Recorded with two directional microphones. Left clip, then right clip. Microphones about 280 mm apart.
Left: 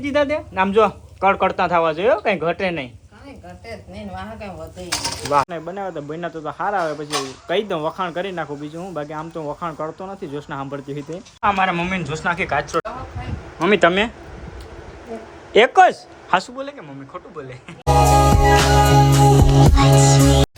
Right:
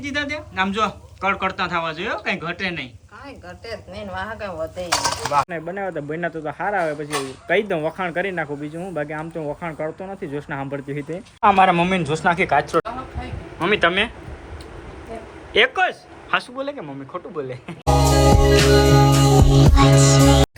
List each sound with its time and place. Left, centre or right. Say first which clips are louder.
0.0 s speech: left 6 dB; centre
4.2 s speech: right 5 dB; right
5.5 s speech: right 1 dB; centre
13.6 s speech: left 3 dB; centre
15.5 s speech: left 5 dB; left
16.6 s music: right 3 dB; centre